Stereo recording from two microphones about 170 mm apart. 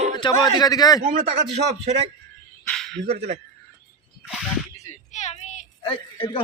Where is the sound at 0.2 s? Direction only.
25° left (ahead or behind).